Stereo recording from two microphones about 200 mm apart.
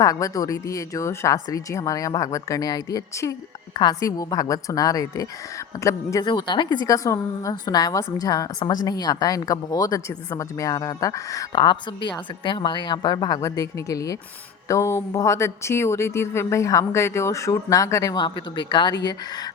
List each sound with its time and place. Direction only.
0.0 s a woman's voice: 15° left (ahead or behind)